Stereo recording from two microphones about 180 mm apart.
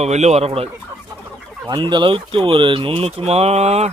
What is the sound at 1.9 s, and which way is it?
Speech, 30° right (ahead or behind).